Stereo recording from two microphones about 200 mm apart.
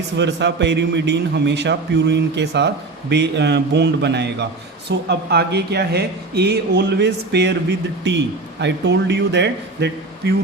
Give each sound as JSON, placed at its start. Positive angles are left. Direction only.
{"t": 0.2, "sound": "a man's voice", "side_deg": -60}